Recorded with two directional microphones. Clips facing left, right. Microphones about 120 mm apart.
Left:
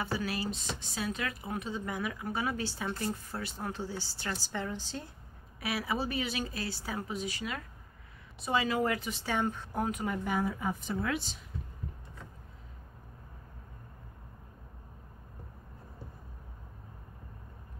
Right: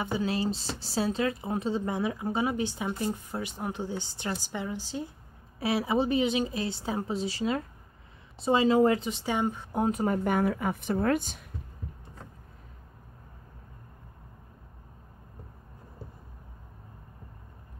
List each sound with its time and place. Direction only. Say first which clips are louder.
0.0 s speech: right 5 dB; 20° right (ahead or behind)
5.6 s speech: right 7 dB; 25° right (ahead or behind)
9.8 s speech: right 10 dB; 40° right (ahead or behind)
10.3 s speech: right 5 dB; 65° right (ahead or behind); by 11.3 s 50° right (ahead or behind)